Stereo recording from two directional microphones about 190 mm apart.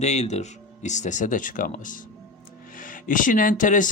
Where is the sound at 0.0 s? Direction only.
35° left (ahead or behind).